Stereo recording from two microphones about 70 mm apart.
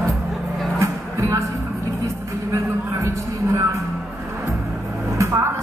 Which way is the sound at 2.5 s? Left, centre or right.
Right.